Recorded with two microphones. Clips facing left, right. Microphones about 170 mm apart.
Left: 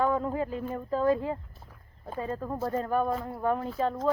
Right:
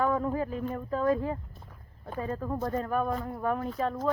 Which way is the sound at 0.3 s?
25° left (ahead or behind).